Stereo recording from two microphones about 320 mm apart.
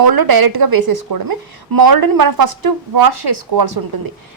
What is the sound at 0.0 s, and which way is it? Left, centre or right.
A woman's voice, right.